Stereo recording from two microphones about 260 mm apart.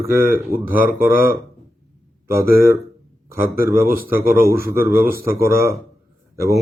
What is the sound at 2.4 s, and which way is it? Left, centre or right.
Speech, centre.